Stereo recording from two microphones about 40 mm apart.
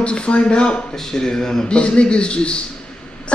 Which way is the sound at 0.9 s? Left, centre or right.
Centre.